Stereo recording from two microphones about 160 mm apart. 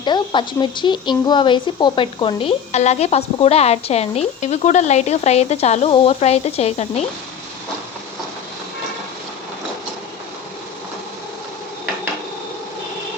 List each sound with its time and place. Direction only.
0.0 s speech: 30° left (ahead or behind)